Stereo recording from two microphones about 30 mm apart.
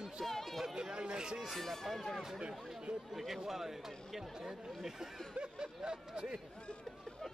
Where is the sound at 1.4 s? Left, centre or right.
Centre.